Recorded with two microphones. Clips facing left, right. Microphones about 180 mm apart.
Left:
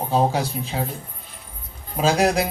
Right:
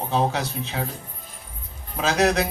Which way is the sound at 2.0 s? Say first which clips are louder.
Left 3 dB; 30° left (ahead or behind).